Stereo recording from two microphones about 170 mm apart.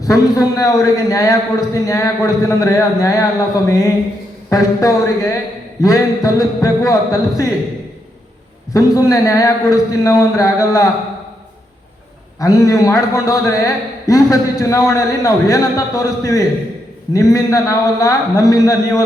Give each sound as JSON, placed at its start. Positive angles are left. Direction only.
{"t": 0.0, "sound": "a man's voice", "side_deg": 20}
{"t": 8.7, "sound": "a man's voice", "side_deg": 20}
{"t": 12.4, "sound": "a man's voice", "side_deg": 20}